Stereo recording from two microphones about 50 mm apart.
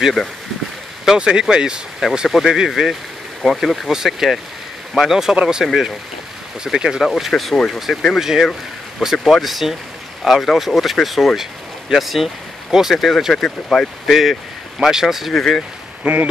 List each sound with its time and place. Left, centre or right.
1.1 s speech: centre
2.2 s speech: centre
3.9 s speech: centre
7.5 s speech: centre
8.2 s speech: centre
15.3 s speech: centre
16.0 s speech: right